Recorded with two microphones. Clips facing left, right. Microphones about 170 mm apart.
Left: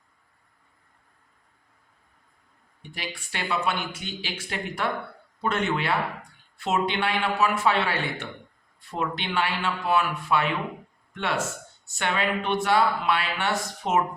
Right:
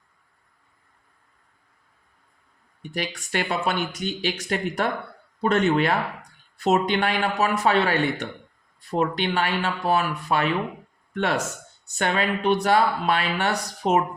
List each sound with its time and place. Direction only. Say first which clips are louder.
2.9 s a man's voice: right 8 dB; 45° right (ahead or behind)